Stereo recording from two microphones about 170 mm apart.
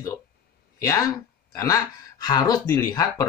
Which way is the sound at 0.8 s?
20° left (ahead or behind).